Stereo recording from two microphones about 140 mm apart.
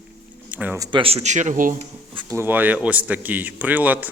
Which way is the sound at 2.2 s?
15° right (ahead or behind).